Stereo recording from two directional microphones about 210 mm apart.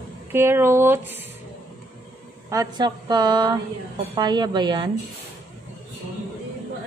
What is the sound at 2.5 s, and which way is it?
A woman's voice, 20° right (ahead or behind).